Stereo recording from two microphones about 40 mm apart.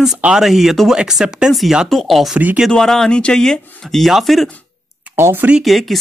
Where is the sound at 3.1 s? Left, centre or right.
Left.